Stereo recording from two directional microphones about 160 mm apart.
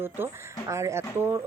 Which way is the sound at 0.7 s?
20° right (ahead or behind).